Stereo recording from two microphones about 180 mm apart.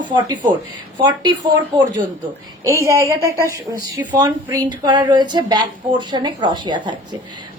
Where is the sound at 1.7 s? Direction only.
25° right (ahead or behind).